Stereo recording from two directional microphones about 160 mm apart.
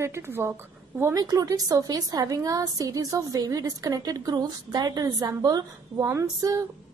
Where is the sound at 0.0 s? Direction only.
15° right (ahead or behind).